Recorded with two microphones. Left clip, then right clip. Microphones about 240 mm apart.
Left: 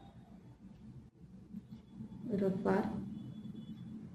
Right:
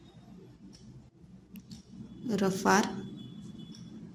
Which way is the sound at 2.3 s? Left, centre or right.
Right.